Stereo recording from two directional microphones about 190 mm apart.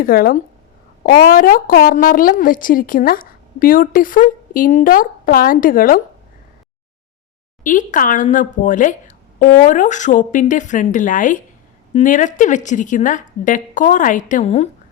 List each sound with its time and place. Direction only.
0.0 s a woman's voice: 50° left (ahead or behind)
7.6 s a woman's voice: 45° left (ahead or behind)